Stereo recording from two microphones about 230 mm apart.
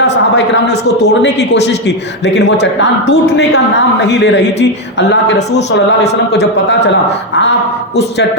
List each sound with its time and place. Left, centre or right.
0.0 s a sound: left
2.2 s a woman's voice: left
5.5 s a woman's voice: left